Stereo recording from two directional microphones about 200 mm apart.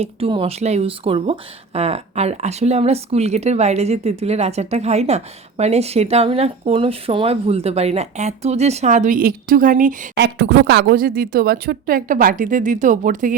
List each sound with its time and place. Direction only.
0.0 s speech: 25° right (ahead or behind)
10.2 s speech: 60° right (ahead or behind); by 13.3 s 40° right (ahead or behind)